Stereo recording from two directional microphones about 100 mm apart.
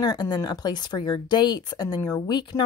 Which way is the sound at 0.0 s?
45° left (ahead or behind).